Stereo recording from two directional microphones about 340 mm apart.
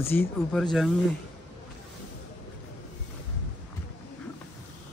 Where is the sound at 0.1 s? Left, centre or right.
Centre.